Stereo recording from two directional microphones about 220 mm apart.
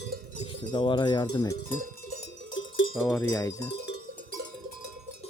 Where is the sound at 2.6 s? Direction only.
60° left (ahead or behind).